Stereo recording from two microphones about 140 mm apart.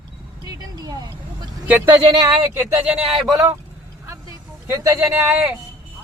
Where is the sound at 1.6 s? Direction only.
10° right (ahead or behind).